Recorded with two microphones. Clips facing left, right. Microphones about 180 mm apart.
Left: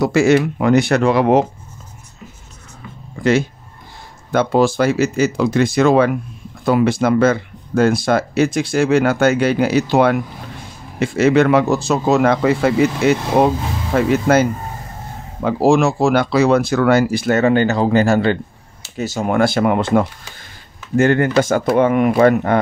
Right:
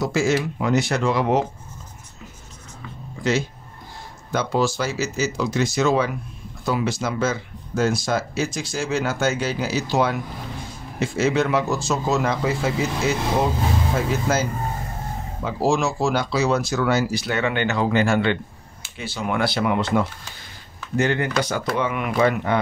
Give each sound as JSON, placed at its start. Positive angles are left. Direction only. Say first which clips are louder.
{"t": 0.0, "sound": "speech", "louder": "left 8 dB", "side_deg": 65}
{"t": 4.3, "sound": "speech", "louder": "left 7 dB", "side_deg": 55}